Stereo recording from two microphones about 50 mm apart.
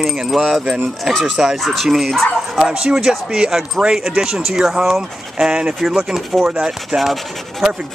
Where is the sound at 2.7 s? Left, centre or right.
Centre.